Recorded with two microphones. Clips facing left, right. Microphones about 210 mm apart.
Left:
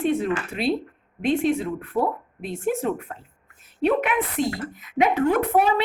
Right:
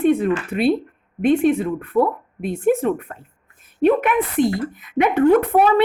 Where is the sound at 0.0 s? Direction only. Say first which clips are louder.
Right 6 dB; 55° right (ahead or behind).